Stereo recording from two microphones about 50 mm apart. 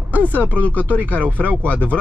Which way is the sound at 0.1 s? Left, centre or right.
Right.